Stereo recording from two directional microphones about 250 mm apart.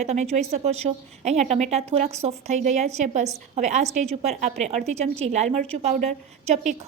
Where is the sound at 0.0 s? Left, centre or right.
Right.